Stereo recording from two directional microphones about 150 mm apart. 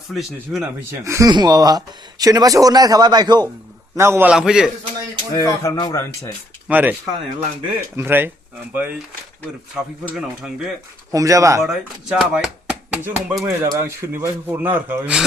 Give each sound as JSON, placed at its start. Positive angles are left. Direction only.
{"t": 0.1, "sound": "speech", "side_deg": 0}
{"t": 1.0, "sound": "speech", "side_deg": -20}
{"t": 4.3, "sound": "speech", "side_deg": -5}
{"t": 5.3, "sound": "speech", "side_deg": 20}
{"t": 6.7, "sound": "speech", "side_deg": -10}
{"t": 7.9, "sound": "speech", "side_deg": -15}
{"t": 9.7, "sound": "speech", "side_deg": -5}
{"t": 11.1, "sound": "speech", "side_deg": -20}
{"t": 11.6, "sound": "speech", "side_deg": 0}
{"t": 13.4, "sound": "speech", "side_deg": -15}